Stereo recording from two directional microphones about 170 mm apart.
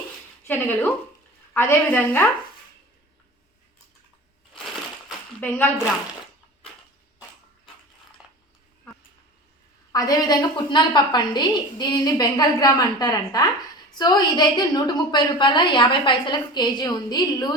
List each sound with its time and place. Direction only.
0.4 s a woman's voice: 10° left (ahead or behind)
8.2 s a sound: 5° right (ahead or behind)
9.9 s a woman's voice: 25° left (ahead or behind)